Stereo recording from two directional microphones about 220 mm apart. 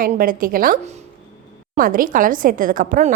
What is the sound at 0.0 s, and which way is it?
A woman's voice, 40° right (ahead or behind).